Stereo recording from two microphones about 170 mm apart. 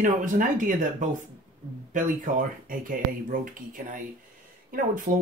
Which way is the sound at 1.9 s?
50° right (ahead or behind).